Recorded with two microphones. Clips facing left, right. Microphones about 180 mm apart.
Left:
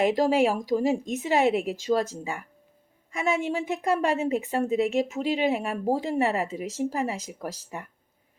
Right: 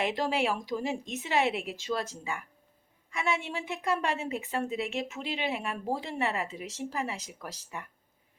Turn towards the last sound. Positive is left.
turn(degrees=45)  # may be behind; listen again after turning